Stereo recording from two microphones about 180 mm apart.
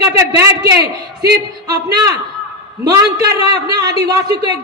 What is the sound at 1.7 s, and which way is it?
Speech, 20° right (ahead or behind).